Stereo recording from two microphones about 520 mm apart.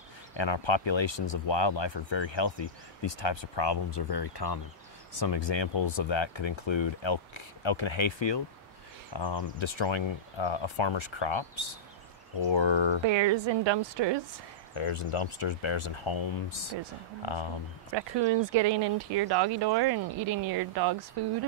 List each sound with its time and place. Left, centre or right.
0.4 s speech: left
13.0 s speech: right
14.8 s speech: left
17.9 s speech: right